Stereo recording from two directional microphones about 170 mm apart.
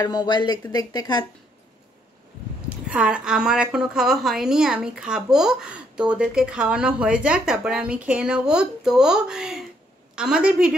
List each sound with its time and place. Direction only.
0.0 s speech: 25° left (ahead or behind)
2.9 s a woman's voice: 5° right (ahead or behind)